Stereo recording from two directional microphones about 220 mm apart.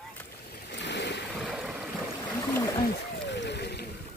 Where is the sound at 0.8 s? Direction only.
50° left (ahead or behind).